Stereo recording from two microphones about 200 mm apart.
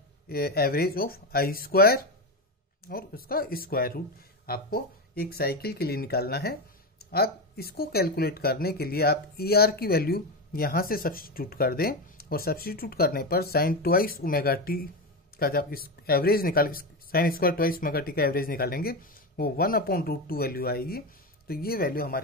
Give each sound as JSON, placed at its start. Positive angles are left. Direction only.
{"t": 0.3, "sound": "speech", "side_deg": 50}